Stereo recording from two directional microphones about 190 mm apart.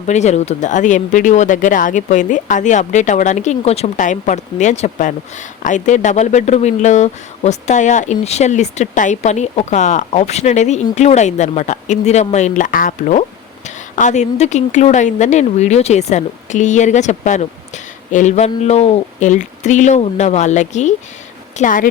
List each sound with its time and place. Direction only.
0.1 s speech: 35° left (ahead or behind)